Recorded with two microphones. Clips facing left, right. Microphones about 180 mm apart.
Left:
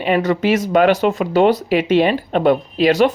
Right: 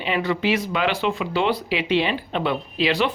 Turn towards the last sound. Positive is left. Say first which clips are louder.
# left 8 dB
turn(degrees=45)  # may be behind; listen again after turning